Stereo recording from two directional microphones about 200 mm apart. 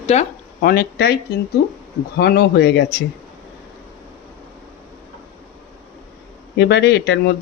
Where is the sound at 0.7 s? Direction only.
50° left (ahead or behind).